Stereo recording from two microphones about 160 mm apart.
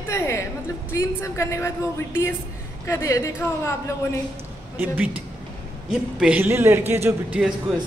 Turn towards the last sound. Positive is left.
turn(degrees=0)  # may be behind; listen again after turning